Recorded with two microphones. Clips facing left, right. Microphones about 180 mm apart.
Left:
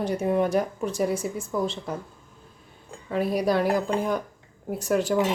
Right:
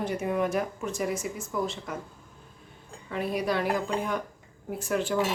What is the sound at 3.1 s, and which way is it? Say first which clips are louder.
Speech: left 5 dB; 35° left (ahead or behind).